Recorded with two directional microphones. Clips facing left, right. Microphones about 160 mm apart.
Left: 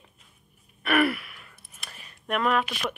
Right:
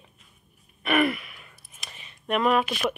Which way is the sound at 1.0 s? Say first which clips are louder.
Even; 5° left (ahead or behind).